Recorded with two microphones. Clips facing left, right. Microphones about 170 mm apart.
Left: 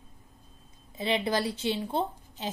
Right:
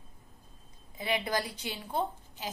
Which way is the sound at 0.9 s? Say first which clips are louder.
Left 4 dB; 25° left (ahead or behind).